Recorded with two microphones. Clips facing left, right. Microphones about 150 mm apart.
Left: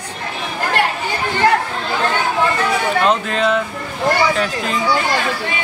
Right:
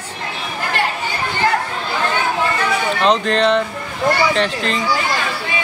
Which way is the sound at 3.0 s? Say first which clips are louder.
Right 5 dB; 5° left (ahead or behind).